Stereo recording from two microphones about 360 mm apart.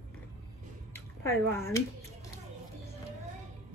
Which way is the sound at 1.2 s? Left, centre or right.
Centre.